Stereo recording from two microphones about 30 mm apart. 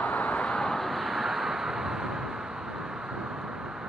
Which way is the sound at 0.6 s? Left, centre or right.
Centre.